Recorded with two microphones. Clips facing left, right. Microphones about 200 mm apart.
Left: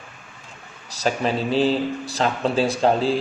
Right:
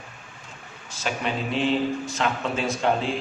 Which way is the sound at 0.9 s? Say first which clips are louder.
Left 6 dB; 40° left (ahead or behind).